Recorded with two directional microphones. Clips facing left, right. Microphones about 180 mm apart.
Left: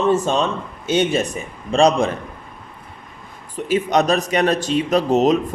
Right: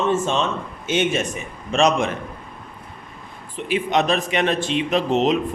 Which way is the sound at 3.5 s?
40° left (ahead or behind).